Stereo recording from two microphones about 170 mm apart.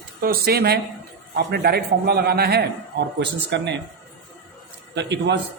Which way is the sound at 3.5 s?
90° right.